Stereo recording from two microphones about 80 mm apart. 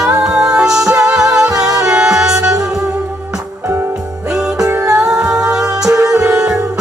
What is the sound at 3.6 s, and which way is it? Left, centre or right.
Music, right.